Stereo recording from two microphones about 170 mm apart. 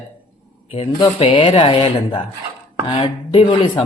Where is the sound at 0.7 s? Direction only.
35° left (ahead or behind).